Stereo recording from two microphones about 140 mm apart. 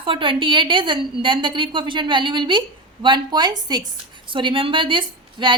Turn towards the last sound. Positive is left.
turn(degrees=-35)  # may be behind; listen again after turning